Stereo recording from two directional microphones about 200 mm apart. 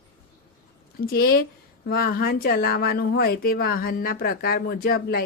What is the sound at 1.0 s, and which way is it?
Speech, 50° left (ahead or behind).